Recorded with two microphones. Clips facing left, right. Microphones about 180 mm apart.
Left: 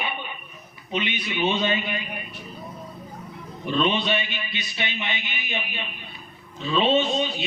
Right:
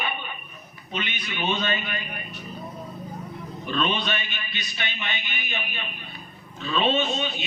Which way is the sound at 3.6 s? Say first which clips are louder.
Left 3 dB; 20° left (ahead or behind).